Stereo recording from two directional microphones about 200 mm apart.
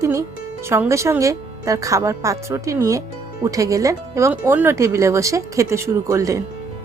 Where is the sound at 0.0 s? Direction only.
15° right (ahead or behind).